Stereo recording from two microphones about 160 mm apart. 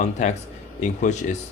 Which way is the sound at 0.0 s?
45° left (ahead or behind).